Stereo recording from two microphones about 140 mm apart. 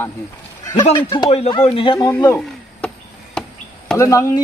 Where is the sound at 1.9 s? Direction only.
15° left (ahead or behind).